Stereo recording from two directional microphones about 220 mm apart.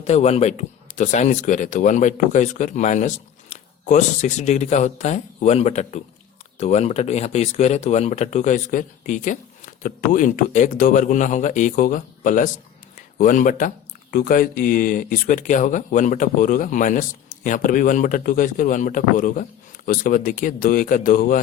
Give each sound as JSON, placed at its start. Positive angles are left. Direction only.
{"t": 0.0, "sound": "speech", "side_deg": 30}